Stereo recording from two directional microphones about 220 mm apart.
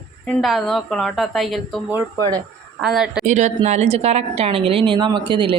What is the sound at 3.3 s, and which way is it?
A woman's voice, 30° right (ahead or behind).